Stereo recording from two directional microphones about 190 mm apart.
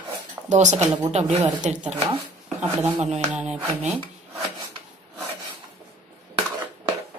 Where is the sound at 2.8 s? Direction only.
35° right (ahead or behind).